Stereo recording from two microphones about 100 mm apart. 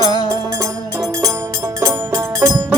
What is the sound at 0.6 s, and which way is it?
Music, 35° right (ahead or behind).